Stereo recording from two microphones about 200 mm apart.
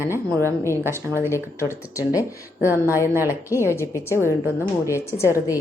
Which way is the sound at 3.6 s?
15° left (ahead or behind).